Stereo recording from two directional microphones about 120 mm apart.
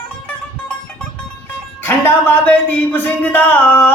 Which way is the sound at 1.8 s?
15° left (ahead or behind).